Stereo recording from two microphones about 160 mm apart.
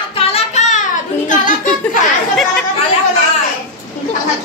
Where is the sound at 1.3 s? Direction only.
55° left (ahead or behind).